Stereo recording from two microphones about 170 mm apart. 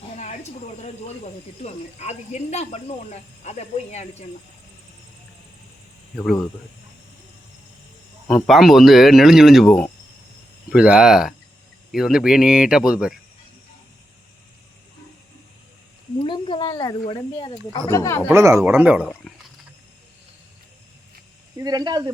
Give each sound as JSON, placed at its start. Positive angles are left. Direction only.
{"t": 0.8, "sound": "speech", "side_deg": 40}
{"t": 8.4, "sound": "speech", "side_deg": 0}
{"t": 16.1, "sound": "a sound", "side_deg": 30}
{"t": 17.1, "sound": "speech", "side_deg": 30}
{"t": 17.8, "sound": "speech", "side_deg": 15}
{"t": 18.3, "sound": "speech", "side_deg": -15}
{"t": 21.5, "sound": "speech", "side_deg": -20}